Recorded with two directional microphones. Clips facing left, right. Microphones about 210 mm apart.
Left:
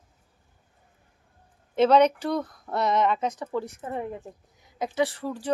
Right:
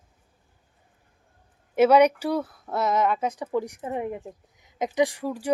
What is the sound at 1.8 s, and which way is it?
Speech, 10° right (ahead or behind).